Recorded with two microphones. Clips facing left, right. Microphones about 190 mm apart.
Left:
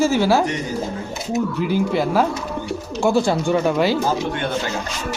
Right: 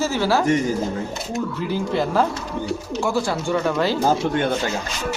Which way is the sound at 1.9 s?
10° left (ahead or behind).